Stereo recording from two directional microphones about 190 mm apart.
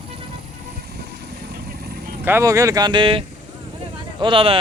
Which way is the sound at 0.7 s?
55° right (ahead or behind).